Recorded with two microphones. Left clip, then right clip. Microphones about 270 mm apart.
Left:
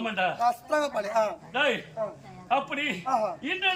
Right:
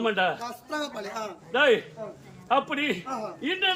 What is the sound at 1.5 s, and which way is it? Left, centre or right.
A man's voice, centre.